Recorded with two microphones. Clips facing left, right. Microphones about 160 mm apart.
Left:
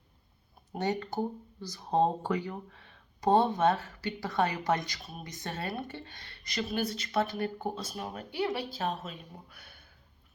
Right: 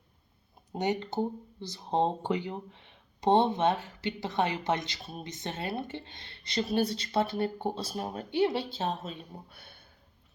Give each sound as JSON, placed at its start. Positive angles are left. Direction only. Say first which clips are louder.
{"t": 0.7, "sound": "speech", "louder": "right 1 dB", "side_deg": -20}